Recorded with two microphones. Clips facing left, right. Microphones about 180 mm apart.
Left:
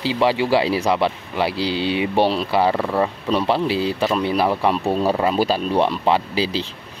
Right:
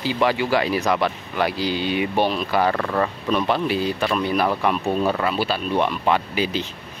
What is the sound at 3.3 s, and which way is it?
Speech, 30° left (ahead or behind).